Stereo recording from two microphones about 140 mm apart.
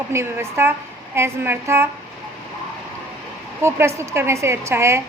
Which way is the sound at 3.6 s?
20° right (ahead or behind).